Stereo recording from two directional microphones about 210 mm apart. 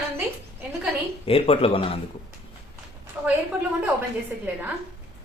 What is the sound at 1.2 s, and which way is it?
Speech, 25° left (ahead or behind).